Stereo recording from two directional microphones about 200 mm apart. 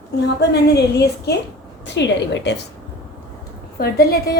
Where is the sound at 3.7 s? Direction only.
50° left (ahead or behind).